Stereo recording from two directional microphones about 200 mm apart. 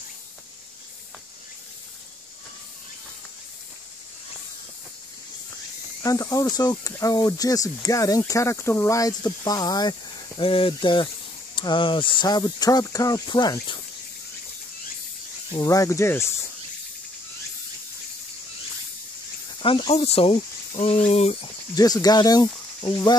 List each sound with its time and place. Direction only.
6.0 s speech: 15° left (ahead or behind)
15.5 s speech: 15° left (ahead or behind)
19.6 s speech: 25° left (ahead or behind)
21.7 s speech: 20° left (ahead or behind)